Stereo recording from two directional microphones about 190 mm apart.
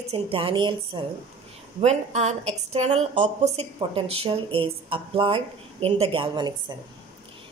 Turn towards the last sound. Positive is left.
turn(degrees=-25)  # may be behind; listen again after turning